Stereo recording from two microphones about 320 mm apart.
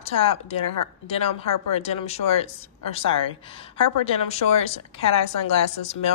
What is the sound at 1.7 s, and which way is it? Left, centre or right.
Speech, centre.